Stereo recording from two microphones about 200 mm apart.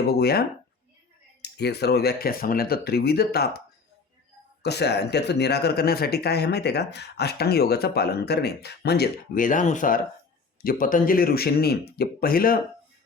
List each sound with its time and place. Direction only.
0.1 s speech: 50° left (ahead or behind)
4.6 s speech: 55° left (ahead or behind)